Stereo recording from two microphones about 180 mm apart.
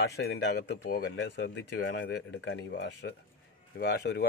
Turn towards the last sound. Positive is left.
turn(degrees=65)  # may be behind; listen again after turning